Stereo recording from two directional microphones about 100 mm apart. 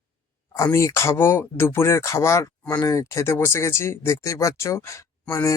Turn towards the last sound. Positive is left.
turn(degrees=30)  # may be behind; listen again after turning